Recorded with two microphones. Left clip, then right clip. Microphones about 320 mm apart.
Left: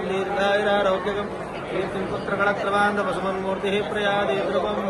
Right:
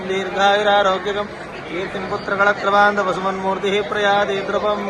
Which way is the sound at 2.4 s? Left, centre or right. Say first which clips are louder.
Right 7 dB; centre.